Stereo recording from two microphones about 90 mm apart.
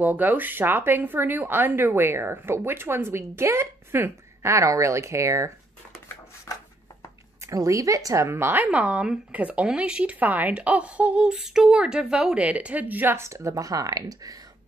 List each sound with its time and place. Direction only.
0.0 s speech: 20° right (ahead or behind); by 5.5 s 35° right (ahead or behind)
6.4 s a sound: 35° left (ahead or behind)
7.4 s speech: 35° right (ahead or behind)
8.7 s speech: 15° right (ahead or behind); by 14.4 s 40° right (ahead or behind)